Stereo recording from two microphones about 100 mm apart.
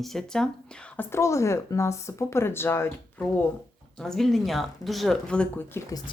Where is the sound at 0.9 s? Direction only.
30° left (ahead or behind).